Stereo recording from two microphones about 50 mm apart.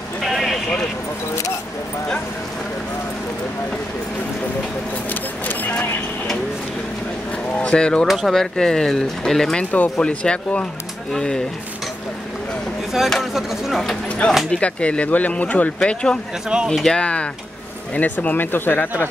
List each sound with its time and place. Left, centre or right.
0.2 s a sound: centre
5.1 s a sound: left
7.5 s speech: centre
8.1 s speech: centre
8.4 s speech: centre
9.6 s speech: left
13.2 s speech: centre
14.0 s speech: left
16.5 s speech: centre
16.8 s speech: centre; by 19.0 s left